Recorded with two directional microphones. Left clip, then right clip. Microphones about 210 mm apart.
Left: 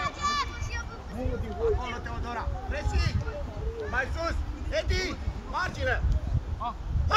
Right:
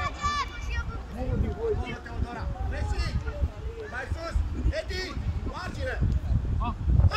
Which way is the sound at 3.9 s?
35° left (ahead or behind).